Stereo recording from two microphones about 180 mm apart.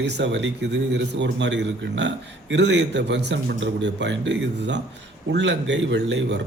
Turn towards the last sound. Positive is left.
turn(degrees=-80)